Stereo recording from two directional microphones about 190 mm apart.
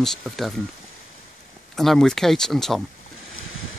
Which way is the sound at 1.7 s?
Centre (ahead or behind).